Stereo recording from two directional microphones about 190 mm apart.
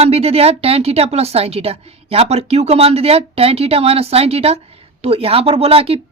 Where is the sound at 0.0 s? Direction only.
30° right (ahead or behind).